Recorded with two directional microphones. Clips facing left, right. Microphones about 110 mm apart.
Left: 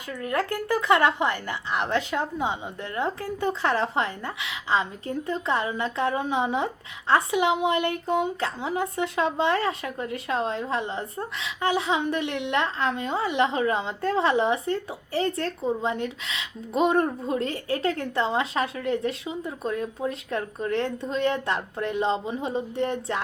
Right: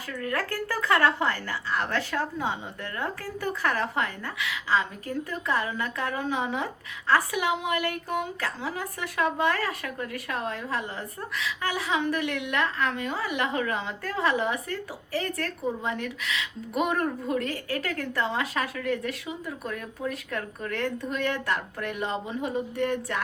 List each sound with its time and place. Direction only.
0.2 s a woman's voice: 20° left (ahead or behind)